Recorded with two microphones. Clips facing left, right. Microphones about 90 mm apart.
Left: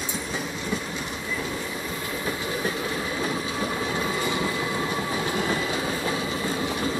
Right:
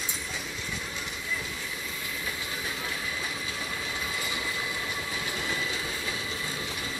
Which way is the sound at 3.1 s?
50° left (ahead or behind).